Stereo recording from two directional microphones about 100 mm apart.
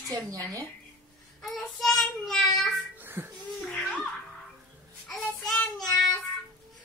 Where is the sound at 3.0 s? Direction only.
20° right (ahead or behind).